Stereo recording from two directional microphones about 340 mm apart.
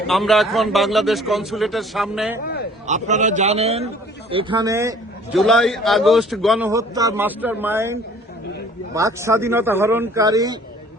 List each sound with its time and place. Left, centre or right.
0.1 s a man's voice: centre
2.8 s a man's voice: right
9.0 s speech: centre